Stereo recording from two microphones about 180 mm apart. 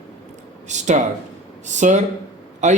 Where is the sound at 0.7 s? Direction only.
40° right (ahead or behind).